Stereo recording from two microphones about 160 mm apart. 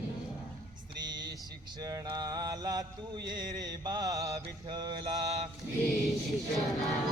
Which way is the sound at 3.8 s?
25° right (ahead or behind).